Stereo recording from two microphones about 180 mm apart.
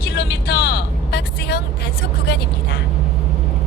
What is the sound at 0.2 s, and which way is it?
Vehicle, 65° left (ahead or behind).